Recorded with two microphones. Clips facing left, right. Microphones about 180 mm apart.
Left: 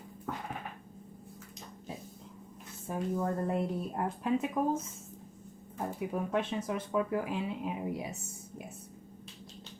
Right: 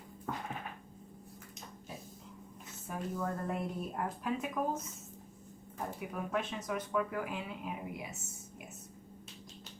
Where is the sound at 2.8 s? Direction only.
25° left (ahead or behind).